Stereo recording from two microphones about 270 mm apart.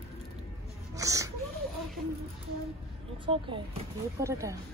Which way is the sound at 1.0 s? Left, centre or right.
Centre.